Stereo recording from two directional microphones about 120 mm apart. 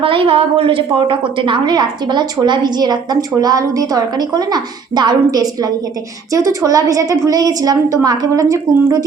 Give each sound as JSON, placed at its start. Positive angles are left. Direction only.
{"t": 0.0, "sound": "a woman's voice", "side_deg": -50}